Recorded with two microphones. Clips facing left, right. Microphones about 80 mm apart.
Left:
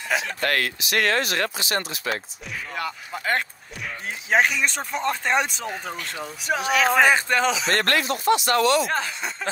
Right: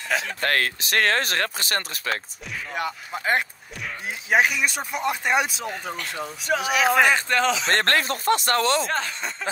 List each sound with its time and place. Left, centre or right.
0.4 s speech: right
2.7 s speech: centre
4.3 s speech: centre
7.1 s speech: centre
7.6 s speech: right
8.8 s speech: centre